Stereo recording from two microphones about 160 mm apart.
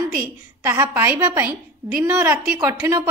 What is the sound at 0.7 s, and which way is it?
A woman's voice, 15° right (ahead or behind).